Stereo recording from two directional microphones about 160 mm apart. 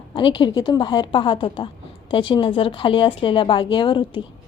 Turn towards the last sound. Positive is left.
turn(degrees=30)  # may be behind; listen again after turning